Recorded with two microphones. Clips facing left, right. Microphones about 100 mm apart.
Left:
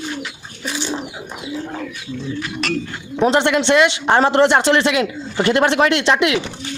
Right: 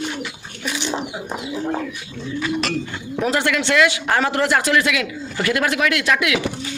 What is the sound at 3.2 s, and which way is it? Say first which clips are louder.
Speech: left 5 dB; 25° left (ahead or behind).